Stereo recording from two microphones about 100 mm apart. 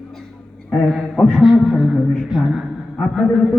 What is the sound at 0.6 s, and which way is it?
A man's voice, 5° left (ahead or behind).